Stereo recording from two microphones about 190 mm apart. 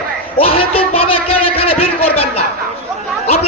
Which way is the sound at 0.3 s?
30° left (ahead or behind).